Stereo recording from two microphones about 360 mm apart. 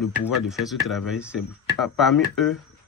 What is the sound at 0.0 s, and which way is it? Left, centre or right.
Speech, centre.